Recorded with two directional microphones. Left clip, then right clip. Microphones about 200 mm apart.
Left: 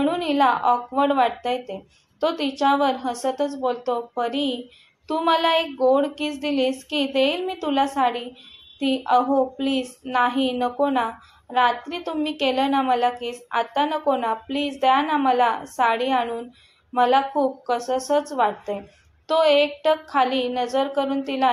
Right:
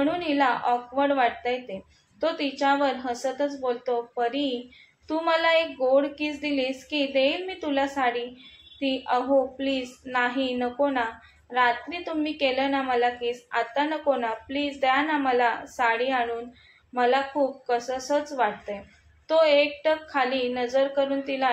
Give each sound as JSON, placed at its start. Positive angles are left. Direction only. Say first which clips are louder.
{"t": 0.0, "sound": "a woman's voice", "louder": "left 4 dB", "side_deg": 20}